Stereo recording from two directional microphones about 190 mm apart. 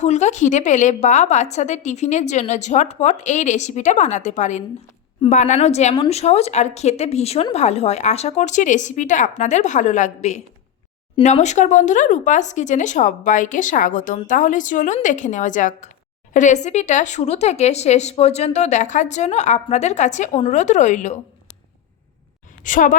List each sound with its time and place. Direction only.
0.0 s speech: 40° left (ahead or behind)
22.6 s a woman's voice: 45° left (ahead or behind)